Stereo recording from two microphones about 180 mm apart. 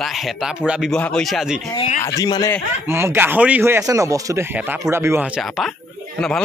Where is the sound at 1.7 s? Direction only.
40° left (ahead or behind).